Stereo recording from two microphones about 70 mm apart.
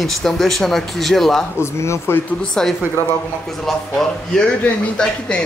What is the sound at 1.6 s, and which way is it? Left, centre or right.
Speech, left.